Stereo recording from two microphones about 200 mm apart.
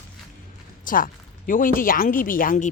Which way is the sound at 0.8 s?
45° left (ahead or behind).